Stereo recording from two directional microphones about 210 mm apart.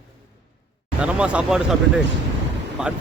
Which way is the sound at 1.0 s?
5° right (ahead or behind).